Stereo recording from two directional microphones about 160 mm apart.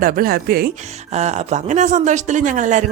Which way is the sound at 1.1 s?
45° right (ahead or behind).